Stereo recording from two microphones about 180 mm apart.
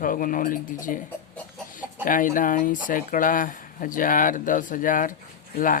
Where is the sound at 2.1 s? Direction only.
50° left (ahead or behind).